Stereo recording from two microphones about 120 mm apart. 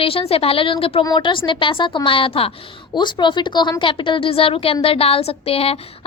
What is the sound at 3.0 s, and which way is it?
A woman's voice, 40° left (ahead or behind).